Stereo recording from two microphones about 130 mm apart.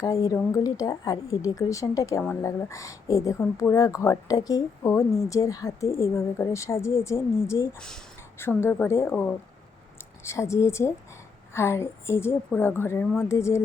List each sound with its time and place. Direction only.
0.0 s speech: 30° left (ahead or behind)
7.8 s speech: 5° left (ahead or behind)
8.4 s speech: 20° left (ahead or behind)